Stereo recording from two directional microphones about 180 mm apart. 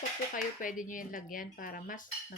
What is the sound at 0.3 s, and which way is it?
A woman's voice, 45° left (ahead or behind).